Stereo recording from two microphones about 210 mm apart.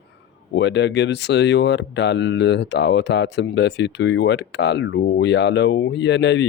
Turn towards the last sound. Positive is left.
turn(degrees=55)  # may be behind; listen again after turning